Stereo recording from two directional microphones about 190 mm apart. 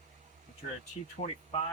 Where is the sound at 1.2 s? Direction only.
30° left (ahead or behind).